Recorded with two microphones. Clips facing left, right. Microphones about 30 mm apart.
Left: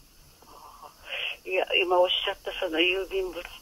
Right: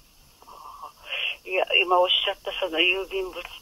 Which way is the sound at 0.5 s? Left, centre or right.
Centre.